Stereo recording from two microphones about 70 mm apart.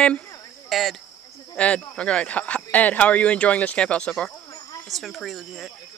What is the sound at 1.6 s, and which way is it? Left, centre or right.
Speech, centre.